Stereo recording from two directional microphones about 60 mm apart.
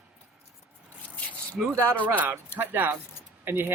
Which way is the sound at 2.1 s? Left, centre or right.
Right.